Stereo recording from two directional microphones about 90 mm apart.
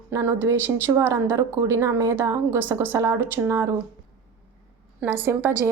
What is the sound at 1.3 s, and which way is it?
A woman's voice, 35° right (ahead or behind).